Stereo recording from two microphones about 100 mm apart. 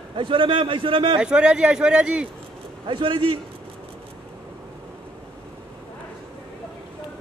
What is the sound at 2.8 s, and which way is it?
Speech, 55° right (ahead or behind).